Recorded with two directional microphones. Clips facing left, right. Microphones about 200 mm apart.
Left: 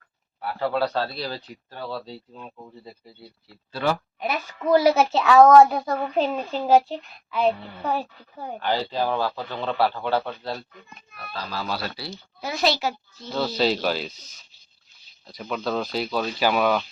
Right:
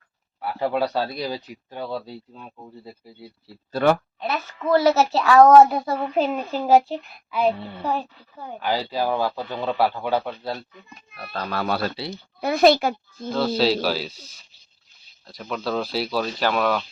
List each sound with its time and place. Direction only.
0.6 s a man's voice: 15° right (ahead or behind)
3.7 s a woman's voice: 55° right (ahead or behind)
4.2 s a child's voice: 15° left (ahead or behind)
5.1 s a child's voice: centre (ahead or behind)
11.2 s a woman's voice: 50° right (ahead or behind)
13.6 s a child's voice: 5° right (ahead or behind)
15.3 s a child's voice: centre (ahead or behind)